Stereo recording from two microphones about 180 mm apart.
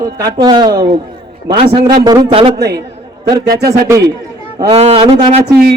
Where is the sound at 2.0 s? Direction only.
20° right (ahead or behind).